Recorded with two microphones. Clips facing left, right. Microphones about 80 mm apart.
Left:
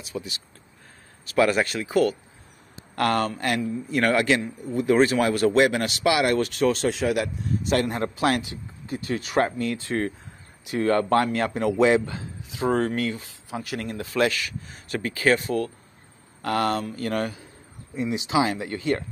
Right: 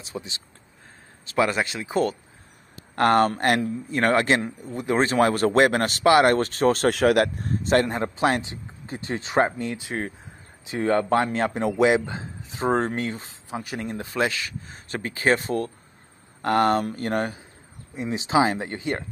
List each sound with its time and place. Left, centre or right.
0.0 s a man's voice: right
3.0 s speech: right
3.9 s speech: right
4.7 s speech: right
7.6 s speech: right
8.2 s a man's voice: right
10.6 s a man's voice: right
17.9 s speech: right
18.8 s a man's voice: right